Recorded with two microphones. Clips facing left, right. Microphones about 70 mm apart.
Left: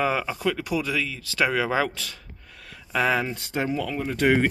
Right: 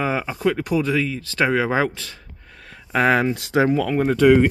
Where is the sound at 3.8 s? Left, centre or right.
Right.